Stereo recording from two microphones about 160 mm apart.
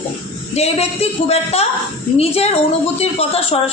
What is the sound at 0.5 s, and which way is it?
A man's voice, 40° left (ahead or behind).